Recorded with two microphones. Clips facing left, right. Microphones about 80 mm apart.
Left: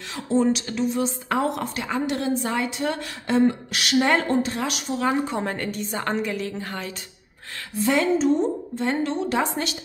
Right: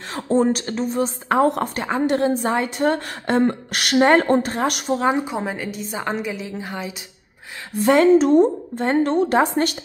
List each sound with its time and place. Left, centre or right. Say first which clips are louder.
0.1 s a woman's voice: right 3 dB; right
5.1 s a woman's voice: right 1 dB; centre
7.7 s a woman's voice: right 7 dB; right